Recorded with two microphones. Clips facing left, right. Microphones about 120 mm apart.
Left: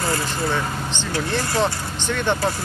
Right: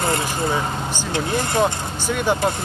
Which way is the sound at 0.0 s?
20° right (ahead or behind).